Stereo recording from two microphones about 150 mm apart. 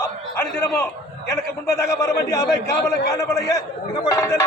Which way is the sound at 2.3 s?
90° left.